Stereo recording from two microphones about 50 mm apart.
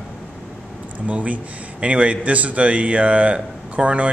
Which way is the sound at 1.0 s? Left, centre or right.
Right.